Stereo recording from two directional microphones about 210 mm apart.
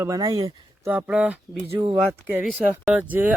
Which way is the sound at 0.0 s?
15° right (ahead or behind).